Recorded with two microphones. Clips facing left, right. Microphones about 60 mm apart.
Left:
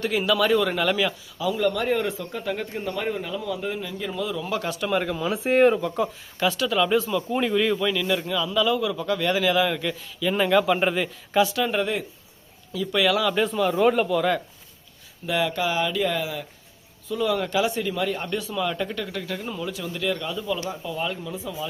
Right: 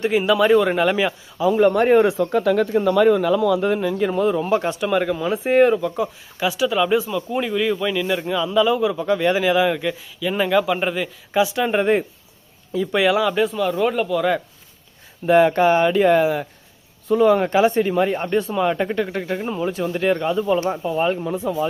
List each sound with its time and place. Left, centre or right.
0.0 s a man's voice: right
2.4 s speech: right
4.8 s a man's voice: centre
11.3 s a man's voice: centre
13.3 s speech: centre
15.3 s speech: right
17.1 s speech: right
21.3 s speech: right